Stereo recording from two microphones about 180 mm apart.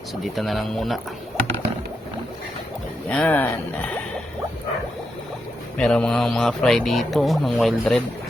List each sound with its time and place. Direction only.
0.3 s speech: centre (ahead or behind)
3.1 s speech: 10° left (ahead or behind)
5.7 s speech: 5° left (ahead or behind)